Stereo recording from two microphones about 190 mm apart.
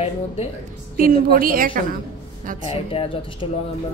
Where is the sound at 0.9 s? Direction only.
50° right (ahead or behind).